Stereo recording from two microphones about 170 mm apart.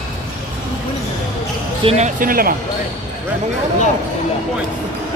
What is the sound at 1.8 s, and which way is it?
Speech, 35° right (ahead or behind).